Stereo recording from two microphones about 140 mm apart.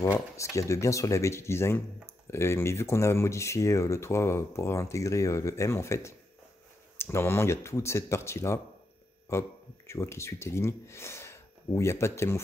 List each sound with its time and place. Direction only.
0.0 s speech: 20° left (ahead or behind)